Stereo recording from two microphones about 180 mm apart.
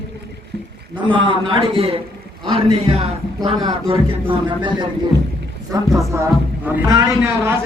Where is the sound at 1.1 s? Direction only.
30° right (ahead or behind).